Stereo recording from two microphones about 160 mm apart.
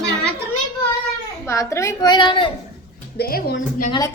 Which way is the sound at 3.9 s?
25° left (ahead or behind).